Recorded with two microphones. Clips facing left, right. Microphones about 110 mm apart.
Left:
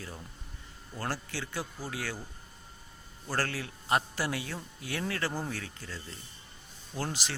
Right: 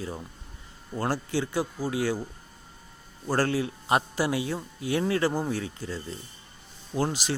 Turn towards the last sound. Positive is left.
turn(degrees=-15)  # may be behind; listen again after turning